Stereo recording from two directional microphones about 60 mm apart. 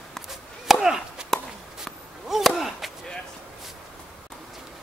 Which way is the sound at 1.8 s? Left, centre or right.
Centre.